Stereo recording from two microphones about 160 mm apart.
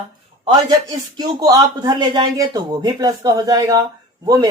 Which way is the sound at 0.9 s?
25° right (ahead or behind).